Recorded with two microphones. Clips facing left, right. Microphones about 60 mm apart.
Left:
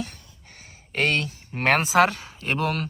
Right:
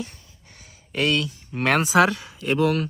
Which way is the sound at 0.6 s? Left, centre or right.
Left.